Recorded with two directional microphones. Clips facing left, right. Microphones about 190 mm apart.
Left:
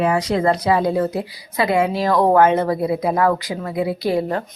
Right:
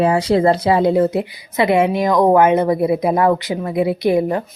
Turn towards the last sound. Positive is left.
turn(degrees=-15)  # may be behind; listen again after turning